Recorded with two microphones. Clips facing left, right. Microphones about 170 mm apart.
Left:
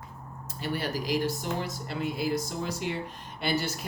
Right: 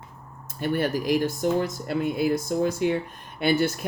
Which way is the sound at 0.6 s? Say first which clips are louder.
Right 7 dB; 50° right (ahead or behind).